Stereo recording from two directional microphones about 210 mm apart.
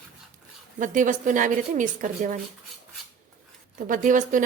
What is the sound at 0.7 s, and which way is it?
A woman's voice, 35° right (ahead or behind).